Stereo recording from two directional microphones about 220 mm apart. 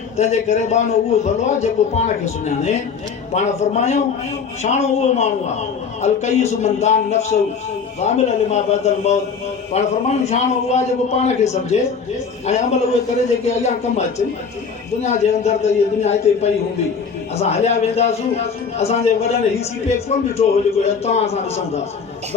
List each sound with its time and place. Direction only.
0.2 s a man's voice: 30° left (ahead or behind)
15.0 s a man's voice: 30° left (ahead or behind)